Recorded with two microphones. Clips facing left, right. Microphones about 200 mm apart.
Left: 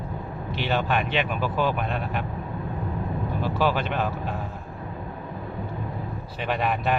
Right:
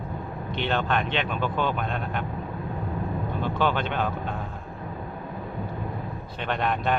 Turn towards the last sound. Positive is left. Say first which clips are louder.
# left 1 dB
turn(degrees=5)  # may be behind; listen again after turning